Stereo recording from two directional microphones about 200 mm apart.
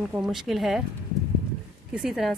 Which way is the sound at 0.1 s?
Centre (ahead or behind).